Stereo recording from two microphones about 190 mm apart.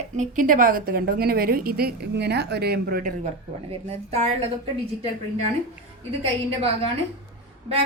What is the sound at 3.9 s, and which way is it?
Speech, 35° right (ahead or behind).